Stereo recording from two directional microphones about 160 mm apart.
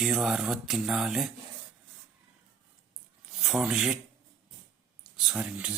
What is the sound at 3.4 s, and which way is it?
Speech, 5° right (ahead or behind).